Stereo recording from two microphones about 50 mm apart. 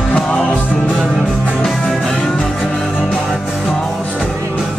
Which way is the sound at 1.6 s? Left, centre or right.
Centre.